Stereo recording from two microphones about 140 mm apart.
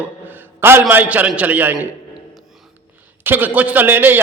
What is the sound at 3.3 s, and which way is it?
Speech, 10° right (ahead or behind).